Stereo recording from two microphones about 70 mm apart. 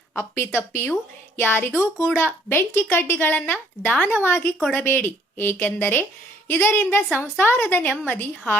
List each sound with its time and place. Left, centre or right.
0.2 s a woman's voice: left